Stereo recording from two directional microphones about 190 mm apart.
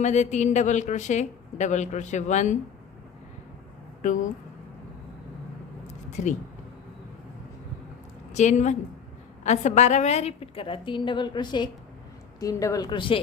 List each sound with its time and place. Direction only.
0.0 s a woman's voice: 40° left (ahead or behind)
4.0 s a woman's voice: 40° left (ahead or behind)
8.3 s a woman's voice: 40° left (ahead or behind)